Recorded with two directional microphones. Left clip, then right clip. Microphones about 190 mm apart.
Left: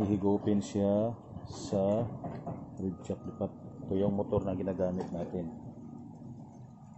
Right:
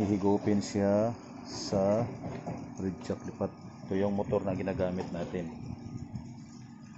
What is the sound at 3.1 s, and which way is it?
Speech, 5° left (ahead or behind).